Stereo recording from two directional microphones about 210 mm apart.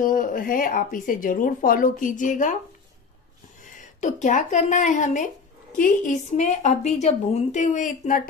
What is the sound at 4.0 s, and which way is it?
A woman's voice, 35° left (ahead or behind).